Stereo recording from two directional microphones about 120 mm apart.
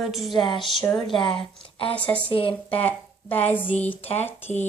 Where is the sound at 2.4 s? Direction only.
50° left (ahead or behind).